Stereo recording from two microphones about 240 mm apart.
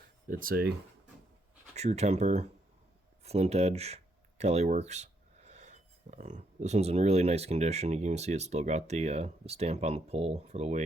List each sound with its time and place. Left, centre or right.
0.3 s speech: right
1.7 s speech: right